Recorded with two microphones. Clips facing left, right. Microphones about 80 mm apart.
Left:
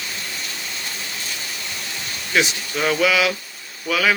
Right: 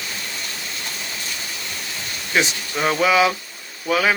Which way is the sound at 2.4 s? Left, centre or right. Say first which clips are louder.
Even; right.